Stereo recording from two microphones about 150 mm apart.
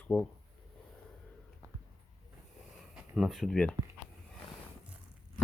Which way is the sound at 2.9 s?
Centre (ahead or behind).